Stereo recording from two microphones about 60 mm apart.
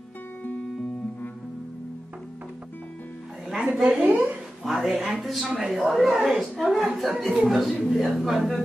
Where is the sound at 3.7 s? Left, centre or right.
Centre.